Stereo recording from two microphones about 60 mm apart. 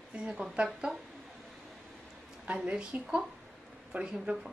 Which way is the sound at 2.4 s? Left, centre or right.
Centre.